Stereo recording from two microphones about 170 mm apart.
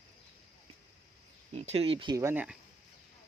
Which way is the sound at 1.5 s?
35° right (ahead or behind).